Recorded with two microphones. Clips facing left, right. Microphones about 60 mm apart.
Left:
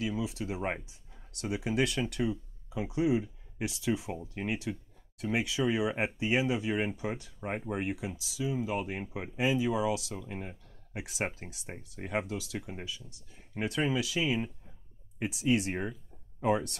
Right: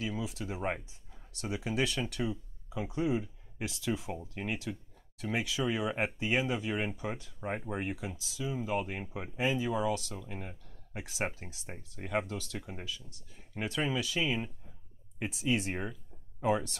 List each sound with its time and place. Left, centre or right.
0.4 s speech: centre
1.8 s speech: left; by 15.9 s centre